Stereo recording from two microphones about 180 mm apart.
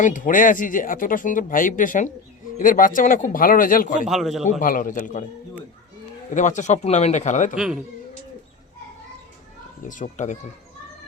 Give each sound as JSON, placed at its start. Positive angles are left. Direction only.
{"t": 0.0, "sound": "speech", "side_deg": 45}
{"t": 4.0, "sound": "a man's voice", "side_deg": 0}
{"t": 4.6, "sound": "speech", "side_deg": 50}
{"t": 6.3, "sound": "speech", "side_deg": 45}
{"t": 7.5, "sound": "a man's voice", "side_deg": -5}
{"t": 9.8, "sound": "speech", "side_deg": 45}